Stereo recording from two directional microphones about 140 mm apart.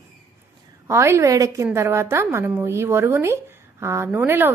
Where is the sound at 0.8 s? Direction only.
20° right (ahead or behind).